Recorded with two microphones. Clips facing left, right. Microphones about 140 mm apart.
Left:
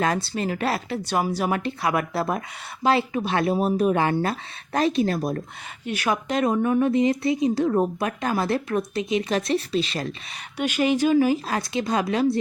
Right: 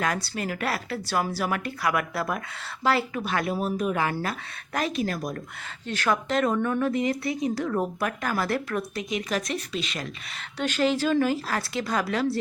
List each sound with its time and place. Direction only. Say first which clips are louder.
0.0 s speech: left 4 dB; 25° left (ahead or behind)
5.8 s speech: left 1 dB; 15° left (ahead or behind); by 10.1 s 35° left (ahead or behind)
10.6 s speech: left 3 dB; 10° left (ahead or behind)